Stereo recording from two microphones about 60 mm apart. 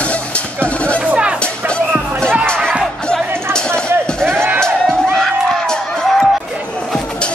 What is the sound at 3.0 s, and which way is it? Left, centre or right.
Music, centre.